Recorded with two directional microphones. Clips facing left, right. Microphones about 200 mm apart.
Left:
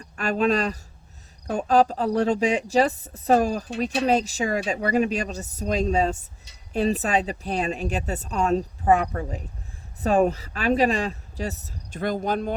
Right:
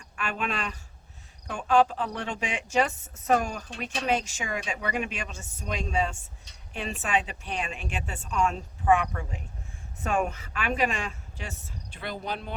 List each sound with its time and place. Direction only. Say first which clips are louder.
0.0 s speech: left 10 dB; 40° left (ahead or behind)